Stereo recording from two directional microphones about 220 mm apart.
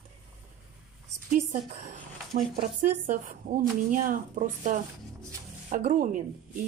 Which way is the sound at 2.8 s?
35° right (ahead or behind).